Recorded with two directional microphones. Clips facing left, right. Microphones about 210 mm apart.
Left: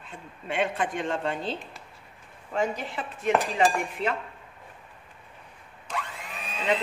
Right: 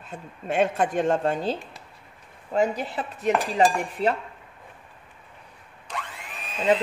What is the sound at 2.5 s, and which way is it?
A woman's voice, 40° right (ahead or behind).